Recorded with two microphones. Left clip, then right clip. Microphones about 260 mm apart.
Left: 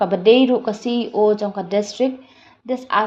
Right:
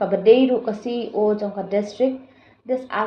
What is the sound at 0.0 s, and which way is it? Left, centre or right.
Speech, left.